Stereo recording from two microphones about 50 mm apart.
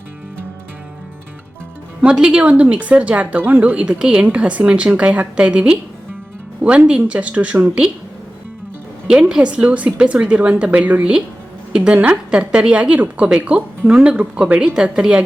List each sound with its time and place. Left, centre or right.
2.0 s a woman's voice: centre
2.5 s a woman's voice: right
4.3 s a woman's voice: right
9.3 s a woman's voice: right
14.6 s a woman's voice: centre